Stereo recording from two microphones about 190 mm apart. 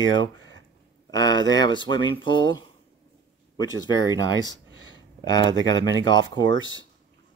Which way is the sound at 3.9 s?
20° left (ahead or behind).